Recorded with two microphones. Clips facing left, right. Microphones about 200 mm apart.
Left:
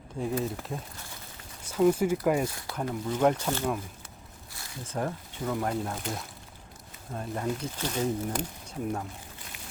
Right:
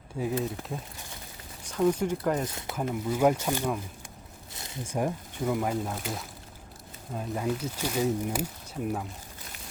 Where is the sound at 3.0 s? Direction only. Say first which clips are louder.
Right 1 dB; 10° right (ahead or behind).